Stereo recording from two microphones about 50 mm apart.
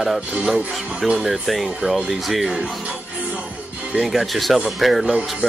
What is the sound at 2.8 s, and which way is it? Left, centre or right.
Music, centre.